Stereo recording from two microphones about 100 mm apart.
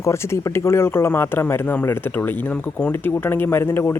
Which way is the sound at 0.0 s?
30° left (ahead or behind).